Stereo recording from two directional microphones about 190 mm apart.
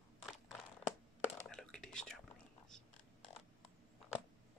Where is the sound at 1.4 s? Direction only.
5° left (ahead or behind).